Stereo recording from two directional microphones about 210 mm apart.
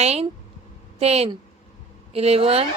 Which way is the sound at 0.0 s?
30° right (ahead or behind).